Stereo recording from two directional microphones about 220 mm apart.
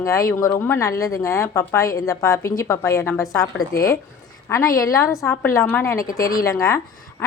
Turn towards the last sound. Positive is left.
turn(degrees=15)  # may be behind; listen again after turning